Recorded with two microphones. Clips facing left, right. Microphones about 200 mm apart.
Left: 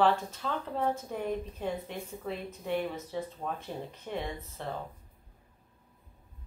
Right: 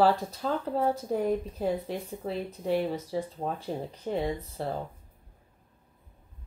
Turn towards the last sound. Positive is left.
turn(degrees=-35)  # may be behind; listen again after turning